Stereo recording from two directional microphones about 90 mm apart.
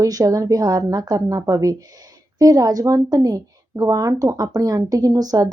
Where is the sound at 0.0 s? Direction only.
40° right (ahead or behind).